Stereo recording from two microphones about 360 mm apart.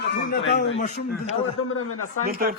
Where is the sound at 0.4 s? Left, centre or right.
Left.